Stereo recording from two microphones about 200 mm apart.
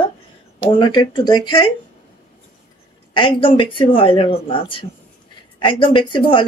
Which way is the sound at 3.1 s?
25° left (ahead or behind).